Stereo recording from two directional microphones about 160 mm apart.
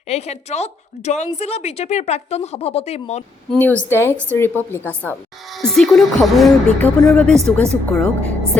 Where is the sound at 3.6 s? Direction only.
10° left (ahead or behind).